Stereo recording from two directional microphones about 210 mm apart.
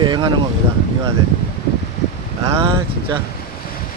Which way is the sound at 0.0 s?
20° right (ahead or behind).